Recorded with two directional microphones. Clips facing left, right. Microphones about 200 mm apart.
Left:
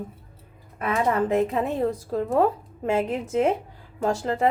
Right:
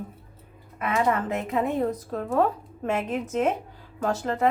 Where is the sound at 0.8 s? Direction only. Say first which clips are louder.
Left 2 dB; 35° left (ahead or behind).